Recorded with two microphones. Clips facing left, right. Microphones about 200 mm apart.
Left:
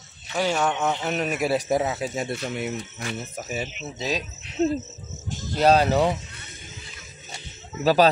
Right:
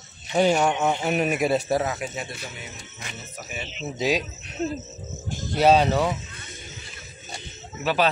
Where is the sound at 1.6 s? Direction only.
20° left (ahead or behind).